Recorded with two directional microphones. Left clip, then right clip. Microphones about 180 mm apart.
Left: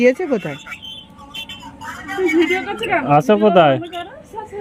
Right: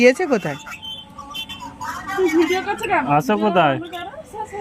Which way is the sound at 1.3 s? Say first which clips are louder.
Even; 45° right (ahead or behind).